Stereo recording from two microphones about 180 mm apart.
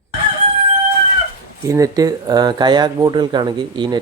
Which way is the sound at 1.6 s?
20° right (ahead or behind).